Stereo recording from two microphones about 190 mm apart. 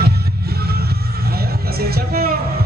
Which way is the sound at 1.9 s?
55° right (ahead or behind).